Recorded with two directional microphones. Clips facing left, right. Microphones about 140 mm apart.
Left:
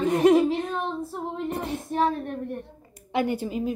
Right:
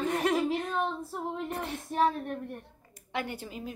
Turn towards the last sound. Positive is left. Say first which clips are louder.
# left 12 dB
turn(degrees=15)  # may be behind; listen again after turning